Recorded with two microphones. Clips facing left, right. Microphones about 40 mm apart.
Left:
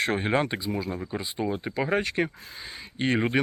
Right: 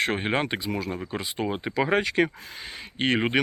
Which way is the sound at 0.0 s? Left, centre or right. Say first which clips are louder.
Even; right.